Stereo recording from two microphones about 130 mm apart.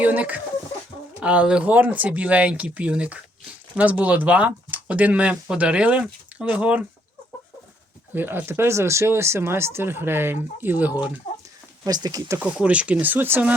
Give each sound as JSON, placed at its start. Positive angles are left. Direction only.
{"t": 0.0, "sound": "speech", "side_deg": -10}
{"t": 8.1, "sound": "speech", "side_deg": -15}
{"t": 11.9, "sound": "speech", "side_deg": -30}
{"t": 12.4, "sound": "speech", "side_deg": -10}